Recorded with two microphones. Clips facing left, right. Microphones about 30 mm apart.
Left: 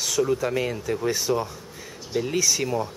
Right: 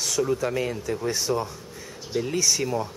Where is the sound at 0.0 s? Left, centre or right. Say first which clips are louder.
Left 1 dB; centre.